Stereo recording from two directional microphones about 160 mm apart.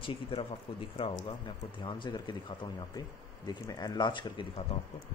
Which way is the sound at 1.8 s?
30° left (ahead or behind).